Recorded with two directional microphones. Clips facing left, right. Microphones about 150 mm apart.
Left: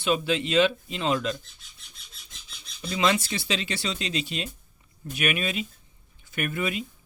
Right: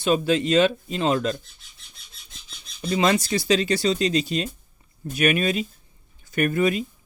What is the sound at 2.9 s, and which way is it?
Speech, 40° right (ahead or behind).